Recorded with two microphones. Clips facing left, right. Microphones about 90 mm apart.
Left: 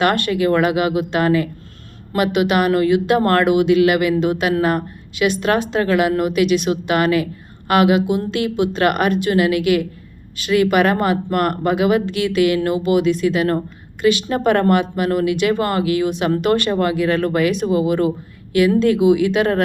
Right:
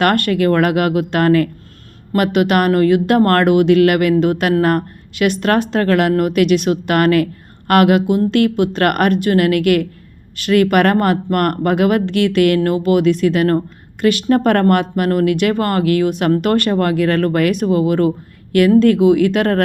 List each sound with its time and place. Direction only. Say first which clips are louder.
0.0 s speech: right 2 dB; 60° right (ahead or behind)